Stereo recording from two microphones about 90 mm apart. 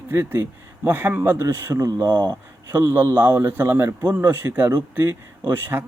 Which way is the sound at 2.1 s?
55° right (ahead or behind).